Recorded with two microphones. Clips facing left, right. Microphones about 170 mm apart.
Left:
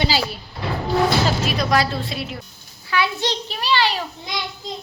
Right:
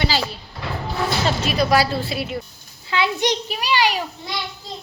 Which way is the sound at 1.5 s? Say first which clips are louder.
Right 2 dB; 5° right (ahead or behind).